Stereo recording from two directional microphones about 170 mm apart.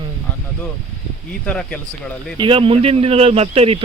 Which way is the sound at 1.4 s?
5° left (ahead or behind).